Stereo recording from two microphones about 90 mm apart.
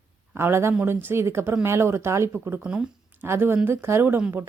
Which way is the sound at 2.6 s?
15° right (ahead or behind).